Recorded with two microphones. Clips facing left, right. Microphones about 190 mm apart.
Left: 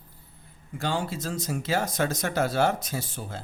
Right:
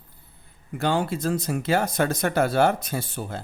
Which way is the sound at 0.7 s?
60° right (ahead or behind).